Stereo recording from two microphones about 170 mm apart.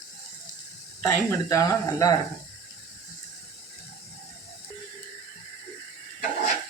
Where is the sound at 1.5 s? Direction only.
20° left (ahead or behind).